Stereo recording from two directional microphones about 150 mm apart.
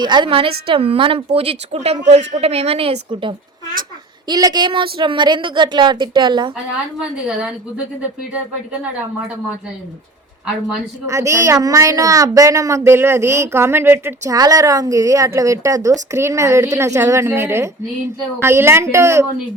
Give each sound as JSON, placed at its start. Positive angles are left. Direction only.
{"t": 0.0, "sound": "a woman's voice", "side_deg": -30}
{"t": 7.0, "sound": "a woman's voice", "side_deg": -5}
{"t": 10.5, "sound": "a woman's voice", "side_deg": -5}
{"t": 11.0, "sound": "a woman's voice", "side_deg": -20}